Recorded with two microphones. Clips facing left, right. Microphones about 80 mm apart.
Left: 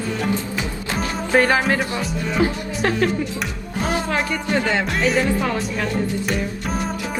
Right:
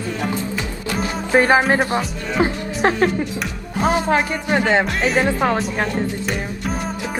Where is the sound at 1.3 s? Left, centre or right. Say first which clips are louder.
Right 3 dB; right.